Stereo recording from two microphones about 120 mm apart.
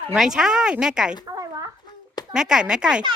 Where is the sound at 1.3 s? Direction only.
30° right (ahead or behind).